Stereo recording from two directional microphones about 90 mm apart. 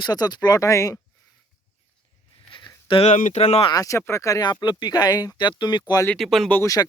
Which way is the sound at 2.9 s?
75° left (ahead or behind).